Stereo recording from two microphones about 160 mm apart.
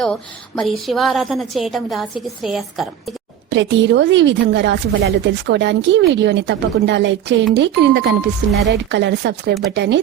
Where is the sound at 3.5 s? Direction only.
90° right.